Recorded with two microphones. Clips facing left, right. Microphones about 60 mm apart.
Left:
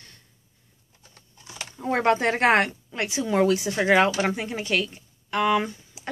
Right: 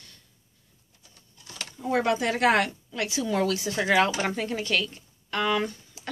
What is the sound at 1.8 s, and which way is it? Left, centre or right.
Speech, left.